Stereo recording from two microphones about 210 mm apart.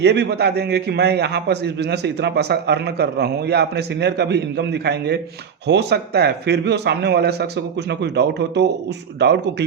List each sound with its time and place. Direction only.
0.0 s a man's voice: 55° right (ahead or behind)